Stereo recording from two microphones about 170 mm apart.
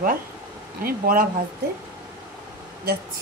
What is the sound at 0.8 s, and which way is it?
Speech, 60° right (ahead or behind).